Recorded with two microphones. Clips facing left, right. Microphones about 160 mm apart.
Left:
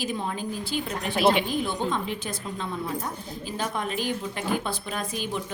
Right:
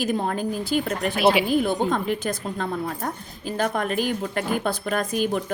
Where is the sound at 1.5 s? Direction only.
50° right (ahead or behind).